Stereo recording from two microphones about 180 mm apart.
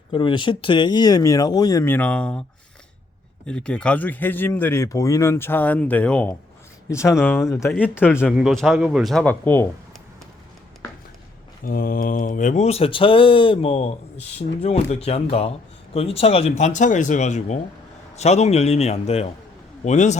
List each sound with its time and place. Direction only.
0.1 s speech: 25° left (ahead or behind); by 2.4 s 5° left (ahead or behind)
3.4 s speech: 5° left (ahead or behind)
8.2 s speech: centre (ahead or behind)
11.6 s speech: 50° left (ahead or behind)